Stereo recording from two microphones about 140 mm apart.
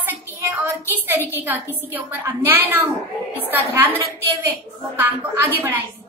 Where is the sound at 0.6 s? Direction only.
15° right (ahead or behind).